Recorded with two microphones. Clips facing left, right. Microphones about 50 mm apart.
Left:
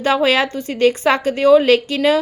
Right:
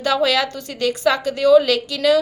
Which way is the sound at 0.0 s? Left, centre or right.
Left.